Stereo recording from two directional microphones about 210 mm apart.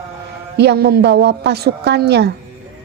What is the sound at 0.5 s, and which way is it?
A woman's voice, 50° right (ahead or behind).